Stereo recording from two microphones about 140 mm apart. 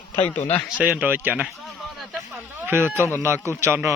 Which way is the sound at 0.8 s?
10° right (ahead or behind).